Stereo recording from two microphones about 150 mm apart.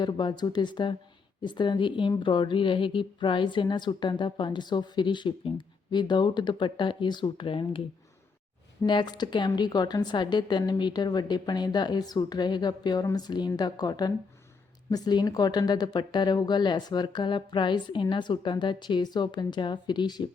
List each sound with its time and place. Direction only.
0.0 s a woman's voice: 30° left (ahead or behind)
8.8 s a woman's voice: 30° left (ahead or behind)